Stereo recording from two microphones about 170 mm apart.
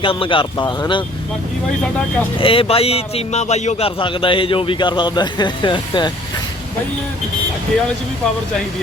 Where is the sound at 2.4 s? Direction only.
30° left (ahead or behind).